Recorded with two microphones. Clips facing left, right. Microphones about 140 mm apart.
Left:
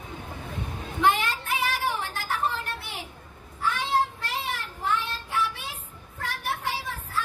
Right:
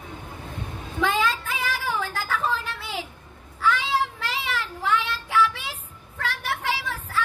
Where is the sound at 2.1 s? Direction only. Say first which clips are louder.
Right 2 dB; 90° right.